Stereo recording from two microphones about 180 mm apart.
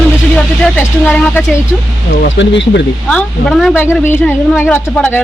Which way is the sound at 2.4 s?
85° left.